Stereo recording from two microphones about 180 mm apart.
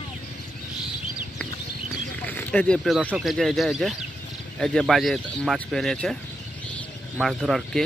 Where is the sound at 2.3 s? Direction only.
10° left (ahead or behind).